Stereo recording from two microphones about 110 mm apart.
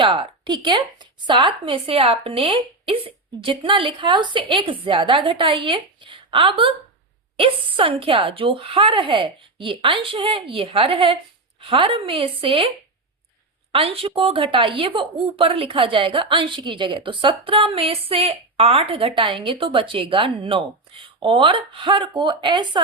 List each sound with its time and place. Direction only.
0.0 s a woman's voice: 45° right (ahead or behind)
13.7 s a woman's voice: 60° right (ahead or behind)